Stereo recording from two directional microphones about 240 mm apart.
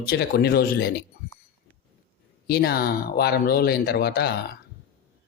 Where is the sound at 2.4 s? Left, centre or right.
Left.